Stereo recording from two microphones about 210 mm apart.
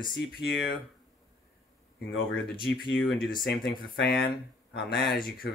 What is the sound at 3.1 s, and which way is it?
Speech, 50° left (ahead or behind).